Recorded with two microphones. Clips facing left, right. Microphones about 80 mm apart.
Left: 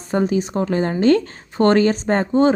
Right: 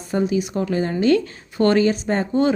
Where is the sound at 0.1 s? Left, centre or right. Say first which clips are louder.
Left 2 dB; left.